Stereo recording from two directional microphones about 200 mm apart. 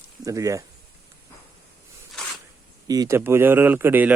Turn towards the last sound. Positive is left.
turn(degrees=-10)  # may be behind; listen again after turning